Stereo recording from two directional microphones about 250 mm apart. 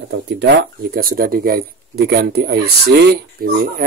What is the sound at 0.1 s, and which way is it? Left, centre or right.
Speech, right.